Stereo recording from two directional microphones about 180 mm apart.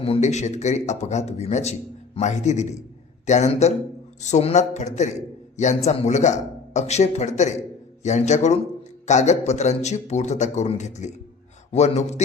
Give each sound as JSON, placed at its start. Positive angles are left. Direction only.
{"t": 0.0, "sound": "a man's voice", "side_deg": 35}